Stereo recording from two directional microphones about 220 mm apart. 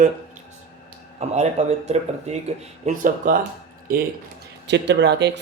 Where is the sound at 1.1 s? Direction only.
30° right (ahead or behind).